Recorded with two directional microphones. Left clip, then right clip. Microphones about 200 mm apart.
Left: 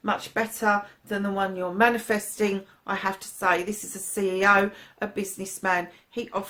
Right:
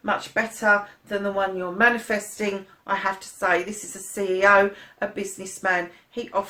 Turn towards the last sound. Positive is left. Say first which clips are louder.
# right 2 dB
turn(degrees=45)  # may be behind; listen again after turning